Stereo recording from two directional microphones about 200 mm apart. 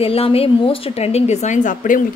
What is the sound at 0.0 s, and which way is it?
A woman's voice, 30° left (ahead or behind).